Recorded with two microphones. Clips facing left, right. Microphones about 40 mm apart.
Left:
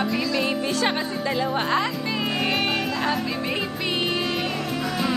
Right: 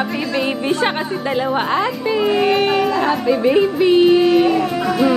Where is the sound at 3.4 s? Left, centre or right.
Centre.